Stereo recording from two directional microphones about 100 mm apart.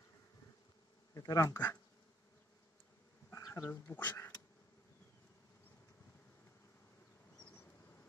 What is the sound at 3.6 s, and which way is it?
Speech, 20° left (ahead or behind).